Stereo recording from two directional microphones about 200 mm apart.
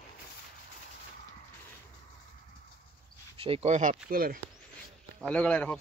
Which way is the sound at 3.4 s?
30° right (ahead or behind).